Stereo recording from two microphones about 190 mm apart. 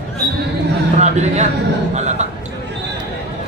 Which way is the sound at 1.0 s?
35° right (ahead or behind).